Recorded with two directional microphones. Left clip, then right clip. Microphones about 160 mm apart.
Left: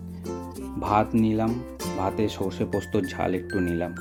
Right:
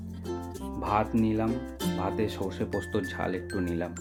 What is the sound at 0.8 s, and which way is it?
Speech, 30° left (ahead or behind).